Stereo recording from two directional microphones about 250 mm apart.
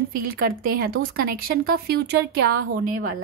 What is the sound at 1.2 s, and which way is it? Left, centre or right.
A woman's voice, right.